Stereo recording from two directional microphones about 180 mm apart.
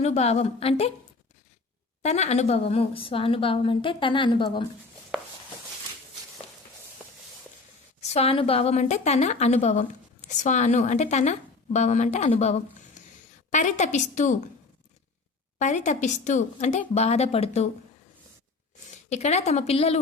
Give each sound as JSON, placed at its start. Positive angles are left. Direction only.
{"t": 0.0, "sound": "a woman's voice", "side_deg": 35}
{"t": 2.0, "sound": "a woman's voice", "side_deg": 40}
{"t": 8.1, "sound": "a woman's voice", "side_deg": 35}
{"t": 15.5, "sound": "a woman's voice", "side_deg": 40}
{"t": 19.0, "sound": "a woman's voice", "side_deg": 40}